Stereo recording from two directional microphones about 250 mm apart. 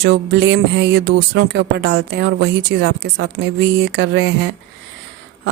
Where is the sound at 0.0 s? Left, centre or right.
Right.